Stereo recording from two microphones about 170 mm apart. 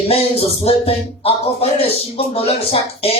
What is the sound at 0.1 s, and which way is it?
Music, 35° left (ahead or behind).